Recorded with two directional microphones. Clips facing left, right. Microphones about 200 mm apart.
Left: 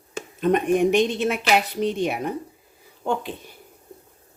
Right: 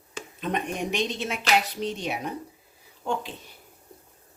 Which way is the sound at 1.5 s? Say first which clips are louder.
Left 1 dB; 55° left (ahead or behind).